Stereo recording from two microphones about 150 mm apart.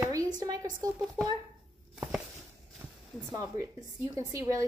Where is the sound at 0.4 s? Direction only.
25° right (ahead or behind).